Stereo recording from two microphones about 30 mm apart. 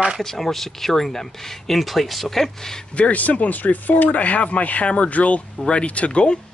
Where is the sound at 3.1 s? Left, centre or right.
Left.